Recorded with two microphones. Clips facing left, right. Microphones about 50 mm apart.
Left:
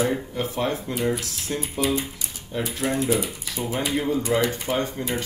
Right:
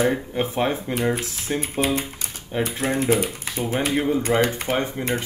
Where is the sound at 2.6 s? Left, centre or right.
Right.